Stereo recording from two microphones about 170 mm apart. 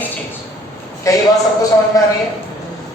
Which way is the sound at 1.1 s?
20° left (ahead or behind).